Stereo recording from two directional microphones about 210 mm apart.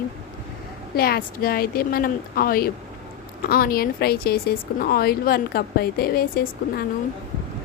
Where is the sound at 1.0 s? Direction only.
45° left (ahead or behind).